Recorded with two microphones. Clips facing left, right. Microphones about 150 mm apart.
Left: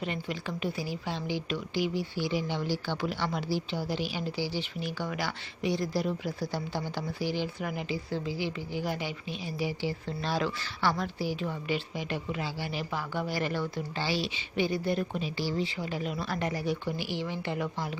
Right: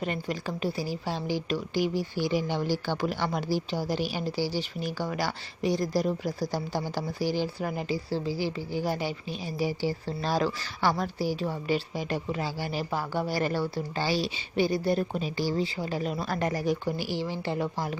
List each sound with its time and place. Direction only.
0.0 s a woman's voice: 45° right (ahead or behind)